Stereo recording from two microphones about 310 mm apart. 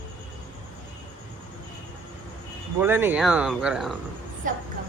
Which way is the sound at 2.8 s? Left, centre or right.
Centre.